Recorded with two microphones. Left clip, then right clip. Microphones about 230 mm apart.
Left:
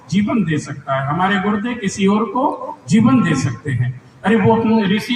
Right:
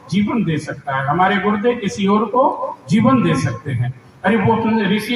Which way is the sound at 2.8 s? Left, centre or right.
Left.